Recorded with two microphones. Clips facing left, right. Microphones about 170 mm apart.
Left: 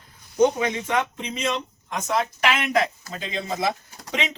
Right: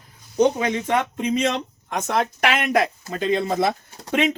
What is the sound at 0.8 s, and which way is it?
Speech, 55° right (ahead or behind).